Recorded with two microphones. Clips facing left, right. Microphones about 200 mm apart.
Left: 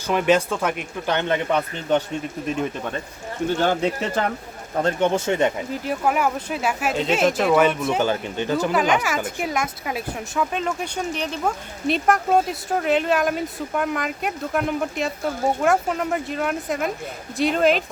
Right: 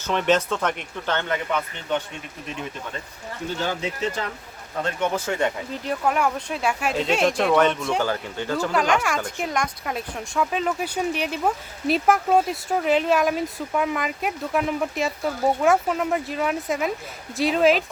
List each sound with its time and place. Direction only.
0.1 s speech: 10° left (ahead or behind)
1.5 s speech: 35° left (ahead or behind)
3.6 s speech: 55° left (ahead or behind)
4.8 s speech: 35° left (ahead or behind)
5.8 s speech: 5° left (ahead or behind)
8.0 s speech: 20° left (ahead or behind)
8.7 s speech: 5° left (ahead or behind)